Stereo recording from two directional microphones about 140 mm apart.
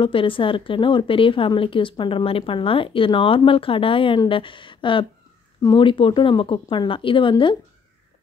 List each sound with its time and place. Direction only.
0.0 s speech: 40° left (ahead or behind)